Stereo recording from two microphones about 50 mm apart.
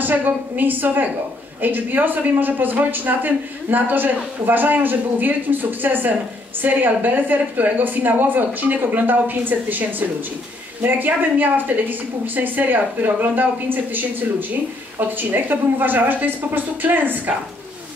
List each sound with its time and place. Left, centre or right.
0.0 s speech: right